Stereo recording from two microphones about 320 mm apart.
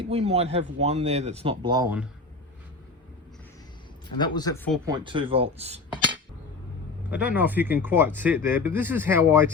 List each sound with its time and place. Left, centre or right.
0.0 s speech: centre
4.2 s speech: centre
4.9 s speech: centre
7.1 s speech: centre